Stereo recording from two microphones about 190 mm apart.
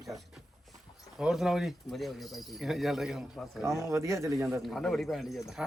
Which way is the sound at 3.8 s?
15° right (ahead or behind).